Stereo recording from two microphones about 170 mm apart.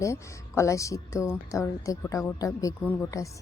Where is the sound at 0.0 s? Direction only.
15° left (ahead or behind).